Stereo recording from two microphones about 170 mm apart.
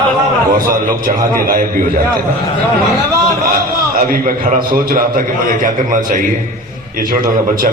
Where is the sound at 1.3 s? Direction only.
55° right (ahead or behind).